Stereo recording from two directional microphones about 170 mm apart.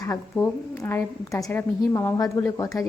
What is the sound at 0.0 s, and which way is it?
A woman's voice, 20° left (ahead or behind).